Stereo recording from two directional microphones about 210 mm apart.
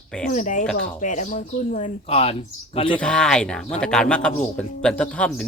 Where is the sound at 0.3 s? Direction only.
35° left (ahead or behind).